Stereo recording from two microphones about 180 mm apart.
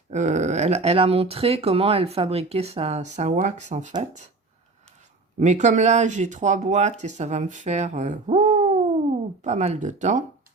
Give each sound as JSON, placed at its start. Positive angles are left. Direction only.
{"t": 0.1, "sound": "speech", "side_deg": -40}
{"t": 5.4, "sound": "speech", "side_deg": -40}